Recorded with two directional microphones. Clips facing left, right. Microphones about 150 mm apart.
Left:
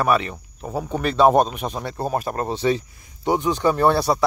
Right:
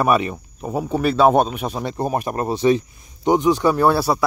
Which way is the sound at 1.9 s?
15° right (ahead or behind).